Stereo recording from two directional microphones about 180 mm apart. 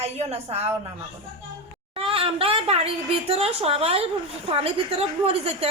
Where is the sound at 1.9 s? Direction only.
30° right (ahead or behind).